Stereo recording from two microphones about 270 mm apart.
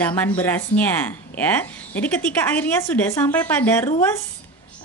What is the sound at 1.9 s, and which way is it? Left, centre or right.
A woman's voice, centre.